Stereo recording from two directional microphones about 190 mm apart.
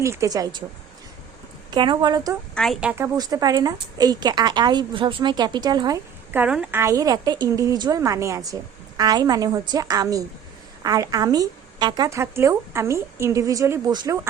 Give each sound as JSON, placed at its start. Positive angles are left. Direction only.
{"t": 0.0, "sound": "a woman's voice", "side_deg": -15}
{"t": 1.7, "sound": "a woman's voice", "side_deg": -25}
{"t": 2.6, "sound": "speech", "side_deg": 0}
{"t": 3.0, "sound": "a woman's voice", "side_deg": -20}
{"t": 6.3, "sound": "a woman's voice", "side_deg": -5}